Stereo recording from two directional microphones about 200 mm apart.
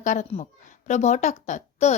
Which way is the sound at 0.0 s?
40° left (ahead or behind).